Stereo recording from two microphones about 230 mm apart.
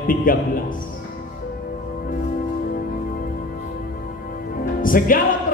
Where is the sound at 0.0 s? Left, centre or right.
Left.